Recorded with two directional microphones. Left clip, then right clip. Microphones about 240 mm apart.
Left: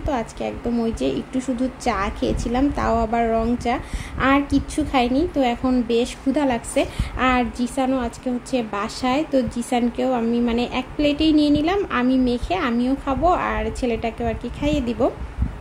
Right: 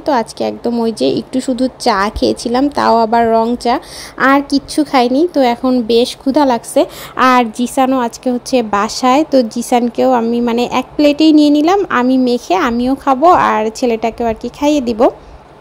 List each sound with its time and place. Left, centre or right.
0.0 s a woman's voice: right